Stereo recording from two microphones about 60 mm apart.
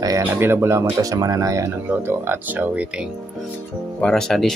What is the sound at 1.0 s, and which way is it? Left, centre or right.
Speech, right.